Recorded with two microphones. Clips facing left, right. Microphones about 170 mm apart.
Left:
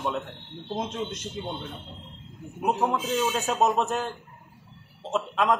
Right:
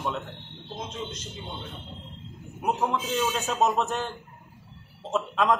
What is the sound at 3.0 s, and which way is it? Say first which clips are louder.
A man's voice: left 1 dB; centre (ahead or behind).